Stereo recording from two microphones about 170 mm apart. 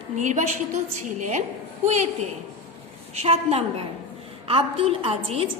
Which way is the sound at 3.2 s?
35° right (ahead or behind).